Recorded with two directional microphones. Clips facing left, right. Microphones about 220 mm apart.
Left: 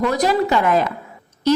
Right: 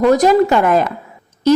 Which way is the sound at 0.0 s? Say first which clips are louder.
Right 7 dB; 45° right (ahead or behind).